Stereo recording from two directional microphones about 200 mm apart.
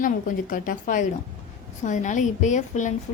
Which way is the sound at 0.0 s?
45° left (ahead or behind).